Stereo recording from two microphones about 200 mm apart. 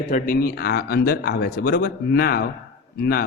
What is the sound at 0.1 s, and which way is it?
A man's voice, 45° left (ahead or behind).